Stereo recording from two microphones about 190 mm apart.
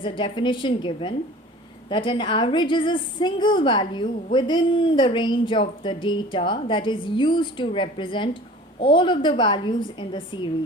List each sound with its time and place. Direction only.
0.0 s a woman's voice: 25° left (ahead or behind)